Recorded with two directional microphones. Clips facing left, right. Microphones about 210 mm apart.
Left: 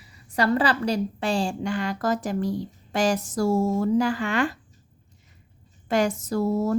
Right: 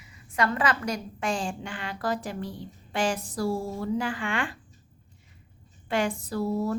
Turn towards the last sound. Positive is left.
turn(degrees=45)  # may be behind; listen again after turning